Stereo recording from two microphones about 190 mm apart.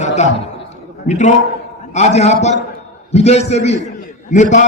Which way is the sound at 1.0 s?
40° left (ahead or behind).